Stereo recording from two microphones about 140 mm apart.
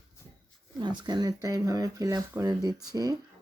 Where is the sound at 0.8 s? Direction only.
30° right (ahead or behind).